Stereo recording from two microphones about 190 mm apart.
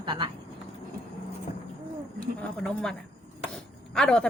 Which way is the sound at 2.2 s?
5° left (ahead or behind).